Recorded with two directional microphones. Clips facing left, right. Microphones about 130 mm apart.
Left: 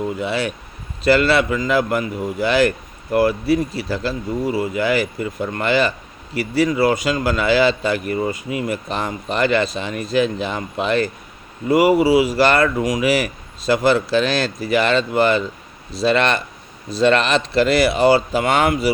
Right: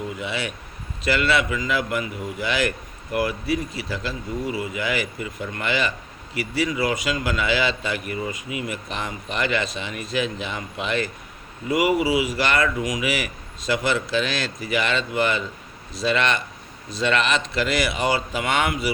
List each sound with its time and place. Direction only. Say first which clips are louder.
0.2 s a man's voice: left 7 dB; 35° left (ahead or behind)